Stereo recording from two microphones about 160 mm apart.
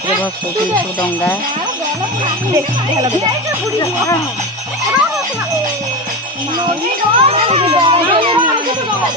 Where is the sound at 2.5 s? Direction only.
25° right (ahead or behind).